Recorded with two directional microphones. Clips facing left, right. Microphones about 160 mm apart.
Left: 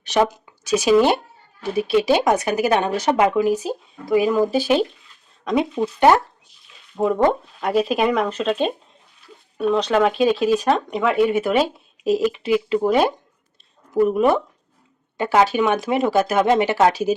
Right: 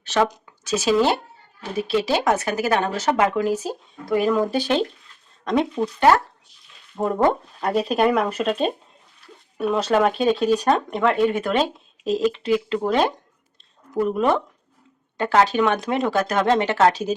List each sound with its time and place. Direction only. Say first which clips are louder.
0.0 s speech: left 2 dB; 15° left (ahead or behind)
6.0 s speech: left 2 dB; 20° left (ahead or behind)
6.9 s speech: left 2 dB; centre (ahead or behind)